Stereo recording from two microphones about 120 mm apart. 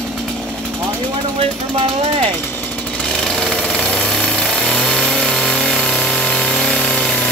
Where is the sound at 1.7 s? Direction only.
55° right (ahead or behind).